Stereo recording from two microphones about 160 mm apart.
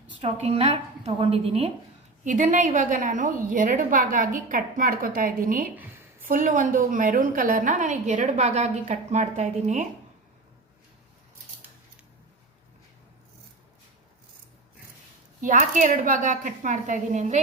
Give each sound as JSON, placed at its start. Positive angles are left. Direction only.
{"t": 0.3, "sound": "a woman's voice", "side_deg": -40}
{"t": 2.2, "sound": "a woman's voice", "side_deg": -55}
{"t": 15.4, "sound": "a woman's voice", "side_deg": -50}